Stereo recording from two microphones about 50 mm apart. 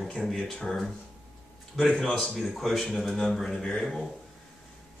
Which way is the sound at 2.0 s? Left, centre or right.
Centre.